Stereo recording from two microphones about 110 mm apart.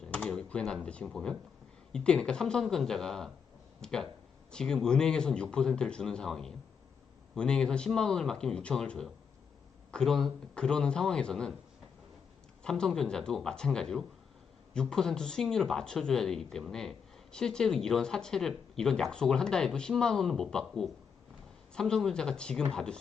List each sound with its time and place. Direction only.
0.0 s computer keyboard: 10° left (ahead or behind)
0.9 s speech: 5° left (ahead or behind)
12.6 s speech: 5° left (ahead or behind)